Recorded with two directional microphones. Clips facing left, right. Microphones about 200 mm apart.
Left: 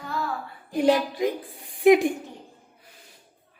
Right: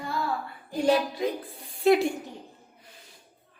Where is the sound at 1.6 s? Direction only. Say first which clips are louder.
Left 4 dB; 15° left (ahead or behind).